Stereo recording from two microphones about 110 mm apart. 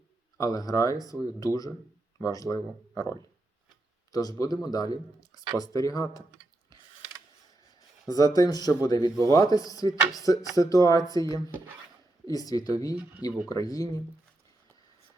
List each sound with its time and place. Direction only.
0.3 s speech: 30° left (ahead or behind)
8.0 s speech: 35° left (ahead or behind)
12.3 s speech: 35° left (ahead or behind)